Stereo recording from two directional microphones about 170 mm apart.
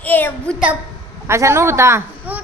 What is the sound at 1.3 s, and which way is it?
A man's voice, 15° right (ahead or behind).